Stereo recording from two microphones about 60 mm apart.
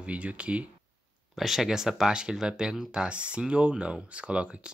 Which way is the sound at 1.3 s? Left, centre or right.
Centre.